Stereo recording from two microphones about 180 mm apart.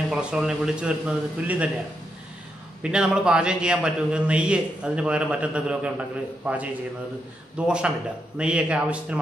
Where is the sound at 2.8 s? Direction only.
5° right (ahead or behind).